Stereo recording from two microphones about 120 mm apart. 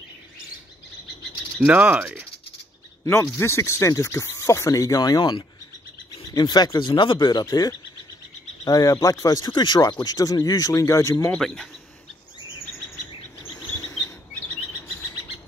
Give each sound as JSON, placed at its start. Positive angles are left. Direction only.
{"t": 1.6, "sound": "speech", "side_deg": -10}
{"t": 3.1, "sound": "speech", "side_deg": 20}
{"t": 9.5, "sound": "speech", "side_deg": 40}
{"t": 11.3, "sound": "speech", "side_deg": 5}
{"t": 13.4, "sound": "cricket", "side_deg": 25}